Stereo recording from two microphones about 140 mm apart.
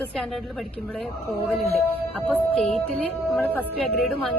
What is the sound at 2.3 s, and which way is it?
A woman's voice, 5° left (ahead or behind).